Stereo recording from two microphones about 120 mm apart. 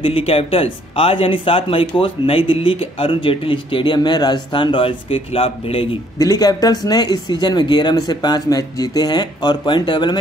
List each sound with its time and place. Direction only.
0.0 s speech: 55° left (ahead or behind)
6.1 s speech: 30° left (ahead or behind)